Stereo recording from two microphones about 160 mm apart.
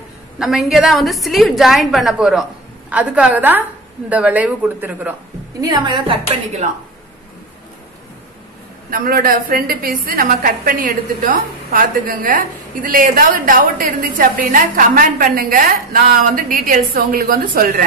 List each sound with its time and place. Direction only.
0.4 s a woman's voice: centre (ahead or behind)
5.6 s a woman's voice: 30° right (ahead or behind)
8.9 s a woman's voice: 65° right (ahead or behind)